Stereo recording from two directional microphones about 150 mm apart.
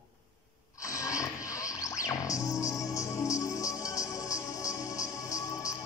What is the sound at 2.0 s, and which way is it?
Music, 20° left (ahead or behind).